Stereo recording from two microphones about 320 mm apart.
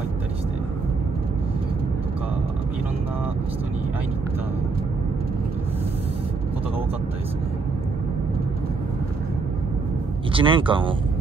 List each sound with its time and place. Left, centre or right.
10.3 s speech: centre